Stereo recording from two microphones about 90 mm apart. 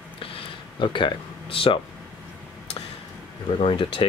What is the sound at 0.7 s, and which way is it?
Speech, 65° left (ahead or behind).